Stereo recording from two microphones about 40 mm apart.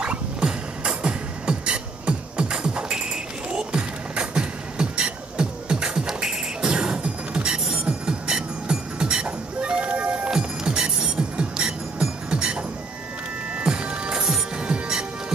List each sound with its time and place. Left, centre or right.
0.0 s beatboxing: right
7.4 s music: centre; by 10.3 s right
10.3 s music: centre